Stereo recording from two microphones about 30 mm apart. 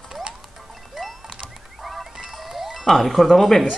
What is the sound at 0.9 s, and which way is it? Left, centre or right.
Music, centre.